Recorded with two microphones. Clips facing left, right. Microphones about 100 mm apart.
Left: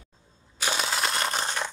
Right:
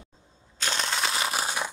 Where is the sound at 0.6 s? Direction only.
5° left (ahead or behind); by 1.7 s 10° right (ahead or behind).